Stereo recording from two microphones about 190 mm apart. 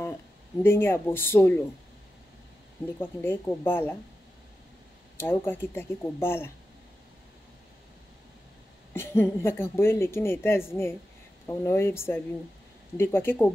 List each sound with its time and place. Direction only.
0.0 s speech: 15° left (ahead or behind)
3.0 s a woman's voice: 10° left (ahead or behind)
5.2 s a woman's voice: 10° left (ahead or behind)
8.9 s a woman's voice: 10° left (ahead or behind)